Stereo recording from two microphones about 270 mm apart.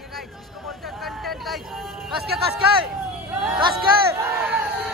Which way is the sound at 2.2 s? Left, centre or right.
Right.